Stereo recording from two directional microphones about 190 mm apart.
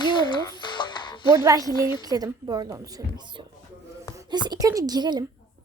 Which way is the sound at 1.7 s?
25° left (ahead or behind).